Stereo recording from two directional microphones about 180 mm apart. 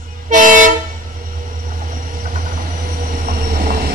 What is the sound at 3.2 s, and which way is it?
Train, 50° right (ahead or behind).